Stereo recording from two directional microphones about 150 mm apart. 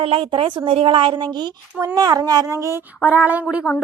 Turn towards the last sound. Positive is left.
turn(degrees=-10)  # may be behind; listen again after turning